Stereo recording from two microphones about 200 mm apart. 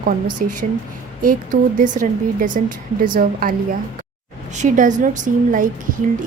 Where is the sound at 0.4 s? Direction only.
45° right (ahead or behind).